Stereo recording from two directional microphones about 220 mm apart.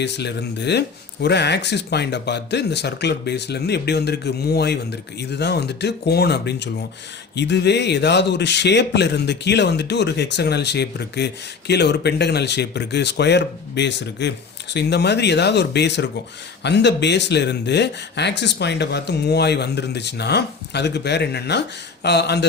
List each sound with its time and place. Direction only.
0.0 s speech: 50° left (ahead or behind)